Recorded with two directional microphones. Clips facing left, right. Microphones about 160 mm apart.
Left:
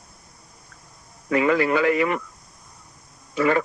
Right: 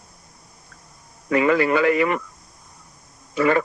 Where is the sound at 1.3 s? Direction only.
70° right (ahead or behind).